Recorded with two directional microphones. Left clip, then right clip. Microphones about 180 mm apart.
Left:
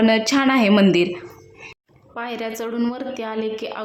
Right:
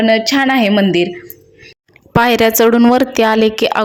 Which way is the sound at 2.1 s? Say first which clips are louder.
Right 17 dB; 60° right (ahead or behind).